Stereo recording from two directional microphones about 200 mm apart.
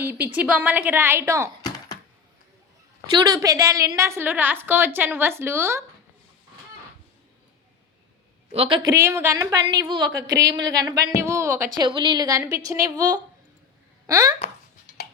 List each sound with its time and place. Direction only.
0.0 s a woman's voice: 10° right (ahead or behind)
3.2 s a woman's voice: 20° right (ahead or behind)
8.5 s speech: 30° right (ahead or behind)
8.9 s a woman's voice: 10° right (ahead or behind)
11.9 s a woman's voice: 25° right (ahead or behind)